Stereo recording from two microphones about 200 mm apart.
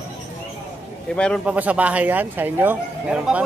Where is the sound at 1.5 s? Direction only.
5° right (ahead or behind).